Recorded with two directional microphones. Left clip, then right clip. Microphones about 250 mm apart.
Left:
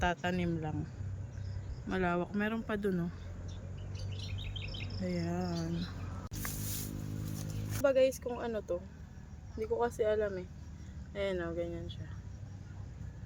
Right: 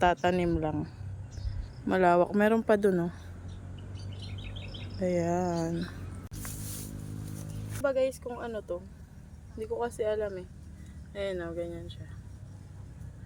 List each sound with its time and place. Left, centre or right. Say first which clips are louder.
0.0 s speech: right 8 dB; centre
1.9 s speech: right 11 dB; centre
5.0 s speech: right 11 dB; centre
7.3 s speech: even; centre